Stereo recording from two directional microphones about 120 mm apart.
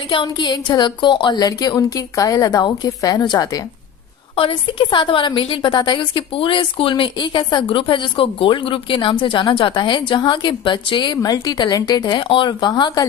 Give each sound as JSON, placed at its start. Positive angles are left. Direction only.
{"t": 0.1, "sound": "speech", "side_deg": 45}
{"t": 4.4, "sound": "a woman's voice", "side_deg": 45}